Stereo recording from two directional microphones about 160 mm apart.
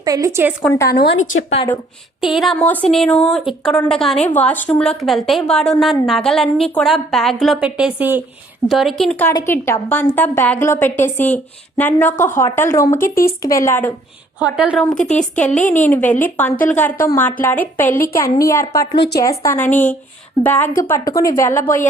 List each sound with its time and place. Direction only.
0.0 s a woman's voice: 20° right (ahead or behind)
0.7 s a woman's voice: 20° left (ahead or behind)
1.1 s a woman's voice: 40° left (ahead or behind)
2.2 s a woman's voice: centre (ahead or behind); by 13.0 s 15° left (ahead or behind)
13.0 s speech: 60° left (ahead or behind)
13.2 s a woman's voice: 20° left (ahead or behind)
14.3 s a woman's voice: 5° right (ahead or behind)
15.1 s a woman's voice: 5° left (ahead or behind)